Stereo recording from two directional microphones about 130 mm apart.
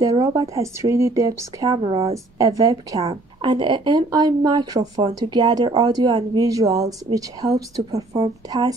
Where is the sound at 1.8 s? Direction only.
45° right (ahead or behind).